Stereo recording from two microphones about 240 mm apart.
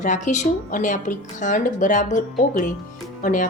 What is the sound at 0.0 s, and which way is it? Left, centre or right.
A woman's voice, left.